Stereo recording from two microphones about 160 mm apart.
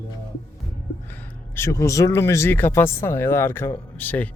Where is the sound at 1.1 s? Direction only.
15° left (ahead or behind).